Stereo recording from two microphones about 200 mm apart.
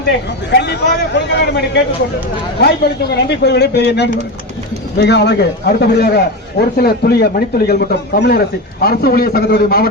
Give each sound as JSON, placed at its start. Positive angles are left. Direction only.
{"t": 0.5, "sound": "a man's voice", "side_deg": 60}